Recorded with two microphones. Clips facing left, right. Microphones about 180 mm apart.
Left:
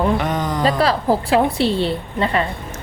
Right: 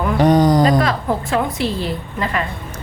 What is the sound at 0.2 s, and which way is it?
Speech, 35° right (ahead or behind).